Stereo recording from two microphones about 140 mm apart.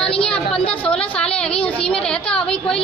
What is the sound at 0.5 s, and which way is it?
Speech, 40° left (ahead or behind).